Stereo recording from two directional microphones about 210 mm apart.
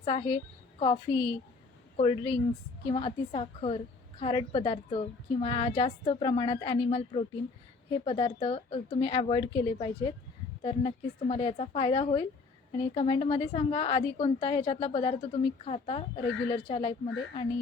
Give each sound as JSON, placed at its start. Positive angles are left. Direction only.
{"t": 0.0, "sound": "a woman's voice", "side_deg": 25}